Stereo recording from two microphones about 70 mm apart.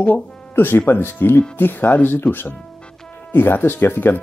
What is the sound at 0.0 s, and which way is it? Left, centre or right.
Speech, left.